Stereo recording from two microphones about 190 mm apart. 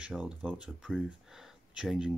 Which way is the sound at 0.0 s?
5° right (ahead or behind).